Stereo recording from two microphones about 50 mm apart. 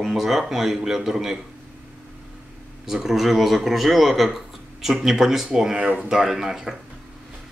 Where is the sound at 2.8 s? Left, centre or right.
Centre.